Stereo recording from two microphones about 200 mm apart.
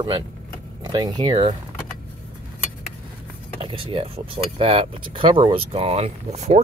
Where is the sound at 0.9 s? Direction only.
20° right (ahead or behind).